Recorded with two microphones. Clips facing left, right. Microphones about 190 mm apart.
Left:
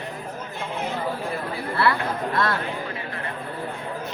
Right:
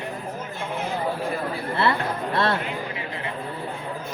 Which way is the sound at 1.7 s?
25° right (ahead or behind).